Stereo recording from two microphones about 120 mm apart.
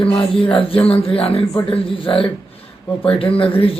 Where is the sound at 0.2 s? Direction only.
45° left (ahead or behind).